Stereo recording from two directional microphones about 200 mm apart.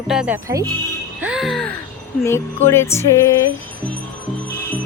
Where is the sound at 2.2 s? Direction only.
10° left (ahead or behind).